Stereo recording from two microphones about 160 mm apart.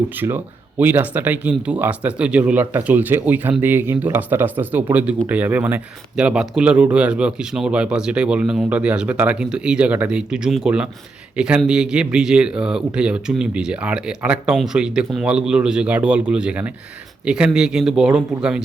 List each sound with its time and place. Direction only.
0.2 s speech: 10° right (ahead or behind)